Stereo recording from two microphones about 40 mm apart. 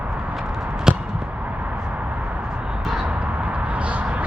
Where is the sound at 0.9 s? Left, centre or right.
Centre.